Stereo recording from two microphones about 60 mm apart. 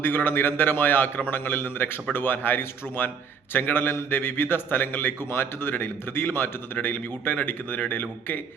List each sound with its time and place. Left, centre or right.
0.0 s a man's voice: left